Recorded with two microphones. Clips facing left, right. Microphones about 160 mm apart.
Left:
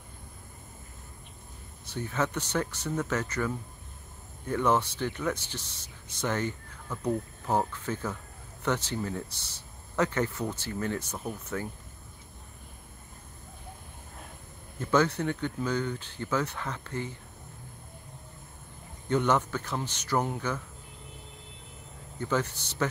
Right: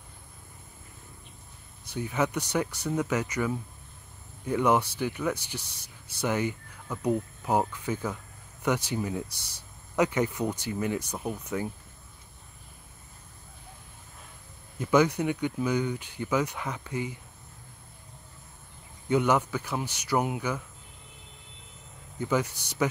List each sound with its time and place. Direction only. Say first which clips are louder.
1.9 s speech: right 2 dB; 15° right (ahead or behind)
14.8 s speech: right 3 dB; 15° right (ahead or behind)
19.0 s speech: right 2 dB; 10° right (ahead or behind)
22.2 s speech: right 2 dB; 10° right (ahead or behind)